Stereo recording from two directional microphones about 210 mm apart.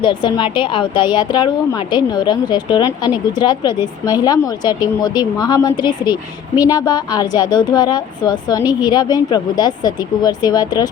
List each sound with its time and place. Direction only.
0.0 s a woman's voice: 20° left (ahead or behind)